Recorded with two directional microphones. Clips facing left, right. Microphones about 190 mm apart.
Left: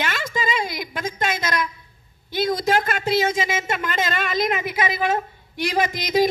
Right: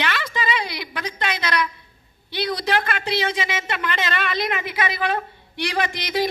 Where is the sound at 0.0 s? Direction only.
45° left (ahead or behind).